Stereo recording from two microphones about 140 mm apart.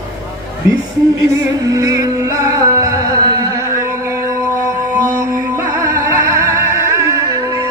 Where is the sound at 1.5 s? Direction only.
25° right (ahead or behind).